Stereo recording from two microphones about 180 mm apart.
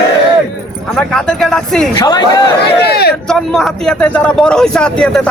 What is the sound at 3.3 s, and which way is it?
A man's voice, 5° left (ahead or behind).